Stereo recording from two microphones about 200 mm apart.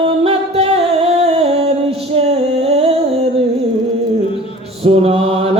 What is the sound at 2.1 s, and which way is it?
Female singing, 30° right (ahead or behind).